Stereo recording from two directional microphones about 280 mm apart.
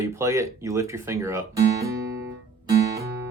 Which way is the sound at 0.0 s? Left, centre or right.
Centre.